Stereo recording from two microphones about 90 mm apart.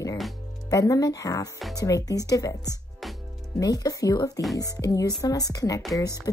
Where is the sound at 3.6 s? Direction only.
40° left (ahead or behind).